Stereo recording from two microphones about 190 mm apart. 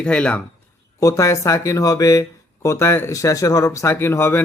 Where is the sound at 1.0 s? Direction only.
15° left (ahead or behind).